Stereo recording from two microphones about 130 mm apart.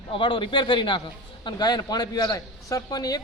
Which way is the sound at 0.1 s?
40° left (ahead or behind).